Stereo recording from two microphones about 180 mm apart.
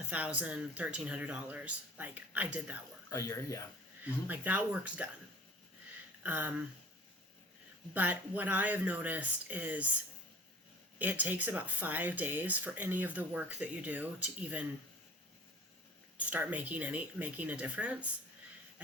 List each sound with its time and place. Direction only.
0.1 s speech: 10° right (ahead or behind)
3.1 s speech: 20° left (ahead or behind)
4.3 s speech: 10° right (ahead or behind)
6.2 s speech: 10° right (ahead or behind)
7.9 s speech: 10° right (ahead or behind)
10.9 s speech: 10° right (ahead or behind)
16.1 s speech: 10° right (ahead or behind)